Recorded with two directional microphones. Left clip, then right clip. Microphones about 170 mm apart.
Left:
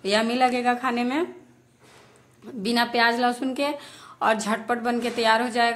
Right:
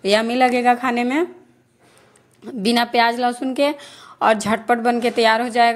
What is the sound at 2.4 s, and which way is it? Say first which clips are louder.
A woman's voice: right 5 dB; 40° right (ahead or behind).